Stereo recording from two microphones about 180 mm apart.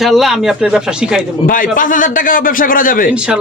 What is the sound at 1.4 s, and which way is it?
A man's voice, 50° left (ahead or behind).